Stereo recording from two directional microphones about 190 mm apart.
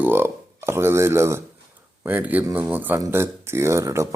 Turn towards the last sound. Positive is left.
turn(degrees=-15)  # may be behind; listen again after turning